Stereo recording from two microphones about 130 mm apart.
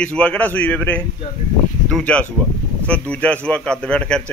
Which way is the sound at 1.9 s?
5° left (ahead or behind).